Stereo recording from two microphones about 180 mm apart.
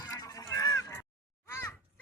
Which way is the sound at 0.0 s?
20° left (ahead or behind).